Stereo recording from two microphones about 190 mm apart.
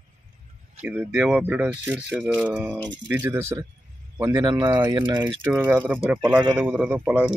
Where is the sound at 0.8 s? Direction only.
5° right (ahead or behind); by 5.2 s 25° right (ahead or behind).